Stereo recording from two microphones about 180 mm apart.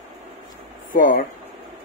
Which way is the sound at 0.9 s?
50° left (ahead or behind).